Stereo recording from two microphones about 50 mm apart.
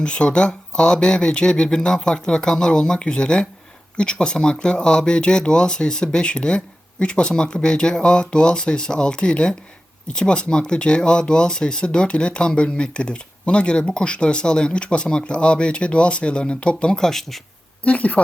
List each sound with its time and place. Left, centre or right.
0.0 s speech: left; by 17.4 s centre
17.8 s speech: left